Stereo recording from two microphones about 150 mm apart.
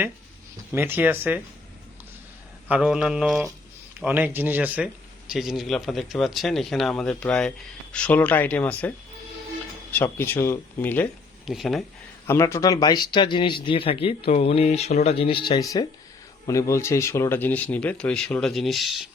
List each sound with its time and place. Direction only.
0.7 s speech: 15° right (ahead or behind)
2.6 s speech: 5° right (ahead or behind)
4.0 s speech: 10° right (ahead or behind); by 8.9 s 10° left (ahead or behind)
9.9 s speech: 15° left (ahead or behind)
11.4 s speech: centre (ahead or behind)
12.3 s speech: 20° left (ahead or behind); by 19.0 s centre (ahead or behind)